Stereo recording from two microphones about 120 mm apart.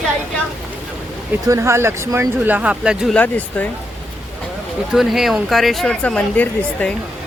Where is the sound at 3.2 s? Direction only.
15° left (ahead or behind).